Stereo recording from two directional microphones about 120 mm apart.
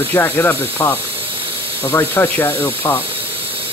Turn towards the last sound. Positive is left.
turn(degrees=20)  # may be behind; listen again after turning